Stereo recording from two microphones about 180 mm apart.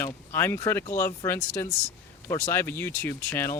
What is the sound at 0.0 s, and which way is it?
Speech, 10° left (ahead or behind).